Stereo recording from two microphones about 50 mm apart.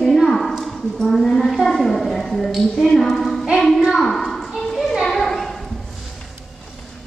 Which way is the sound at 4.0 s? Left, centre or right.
Centre.